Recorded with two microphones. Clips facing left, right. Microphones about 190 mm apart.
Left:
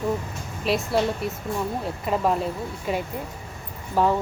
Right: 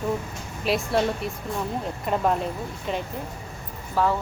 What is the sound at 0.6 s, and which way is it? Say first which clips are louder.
A woman's voice: even; centre (ahead or behind).